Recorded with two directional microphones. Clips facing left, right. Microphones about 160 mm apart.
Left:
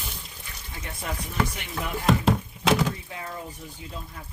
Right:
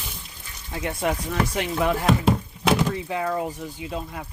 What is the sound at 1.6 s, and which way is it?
Speech, 90° right.